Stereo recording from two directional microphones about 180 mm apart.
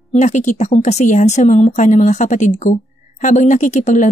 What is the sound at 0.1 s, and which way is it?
A woman's voice, 40° left (ahead or behind).